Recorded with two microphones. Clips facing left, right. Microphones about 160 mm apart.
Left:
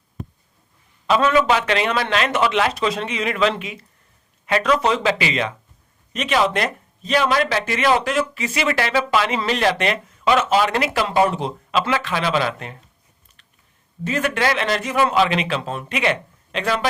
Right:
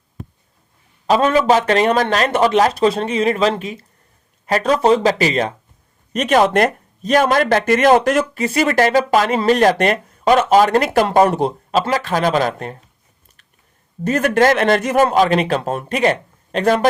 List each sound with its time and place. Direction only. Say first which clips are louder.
1.0 s a man's voice: right 3 dB; 35° right (ahead or behind)
14.0 s speech: right 7 dB; 45° right (ahead or behind)